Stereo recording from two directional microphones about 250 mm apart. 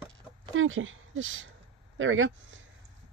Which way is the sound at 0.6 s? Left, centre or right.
Right.